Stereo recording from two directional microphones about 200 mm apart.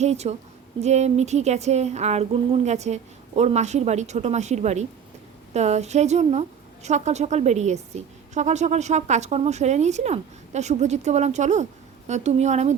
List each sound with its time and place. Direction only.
0.0 s speech: 35° right (ahead or behind)